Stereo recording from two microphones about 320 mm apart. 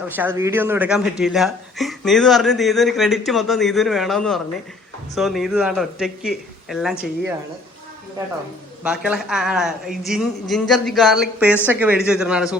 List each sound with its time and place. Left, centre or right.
0.2 s a man's voice: centre
8.8 s a man's voice: centre